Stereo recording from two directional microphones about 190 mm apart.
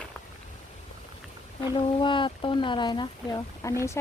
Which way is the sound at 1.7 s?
25° left (ahead or behind).